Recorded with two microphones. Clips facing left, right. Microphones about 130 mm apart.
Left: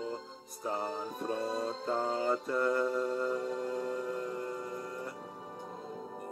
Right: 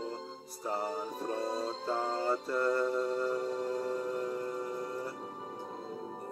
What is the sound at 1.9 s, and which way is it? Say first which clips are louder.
Music: left 1 dB; centre (ahead or behind).